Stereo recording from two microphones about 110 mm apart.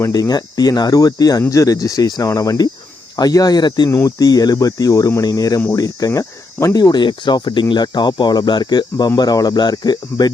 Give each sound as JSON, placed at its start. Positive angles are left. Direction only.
{"t": 0.1, "sound": "speech", "side_deg": 35}
{"t": 3.8, "sound": "speech", "side_deg": 25}